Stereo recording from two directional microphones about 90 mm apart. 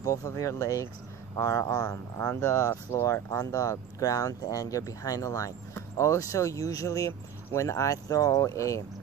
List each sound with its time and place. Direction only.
0.0 s speech: 40° left (ahead or behind)